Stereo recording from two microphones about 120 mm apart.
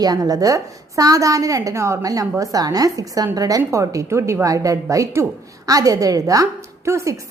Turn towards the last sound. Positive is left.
turn(degrees=-25)  # may be behind; listen again after turning